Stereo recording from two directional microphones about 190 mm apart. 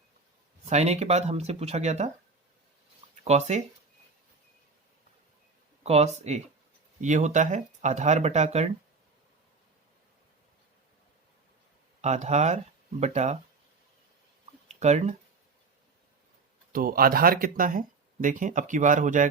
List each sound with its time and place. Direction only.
0.6 s speech: 35° right (ahead or behind)
3.2 s speech: 35° right (ahead or behind)
5.8 s speech: 35° right (ahead or behind)
12.0 s speech: 35° right (ahead or behind)
14.7 s speech: 35° right (ahead or behind)
16.7 s speech: 50° right (ahead or behind)